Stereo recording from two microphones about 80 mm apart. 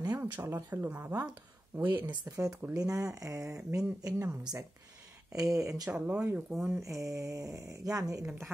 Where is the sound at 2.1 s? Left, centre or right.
Right.